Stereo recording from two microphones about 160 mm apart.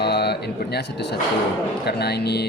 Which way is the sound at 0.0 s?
90° left.